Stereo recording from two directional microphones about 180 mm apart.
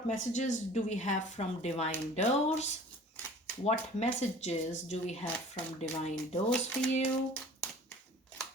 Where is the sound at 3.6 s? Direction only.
40° left (ahead or behind).